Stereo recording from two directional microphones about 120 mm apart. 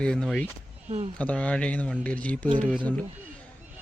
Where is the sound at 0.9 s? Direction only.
75° right (ahead or behind).